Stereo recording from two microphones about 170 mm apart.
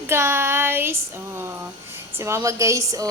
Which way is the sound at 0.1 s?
15° right (ahead or behind).